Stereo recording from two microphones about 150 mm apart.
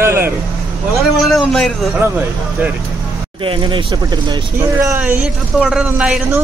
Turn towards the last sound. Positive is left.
turn(degrees=-5)  # may be behind; listen again after turning